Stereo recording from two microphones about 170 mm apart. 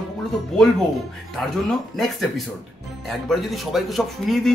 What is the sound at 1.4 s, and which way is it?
Speech, centre (ahead or behind).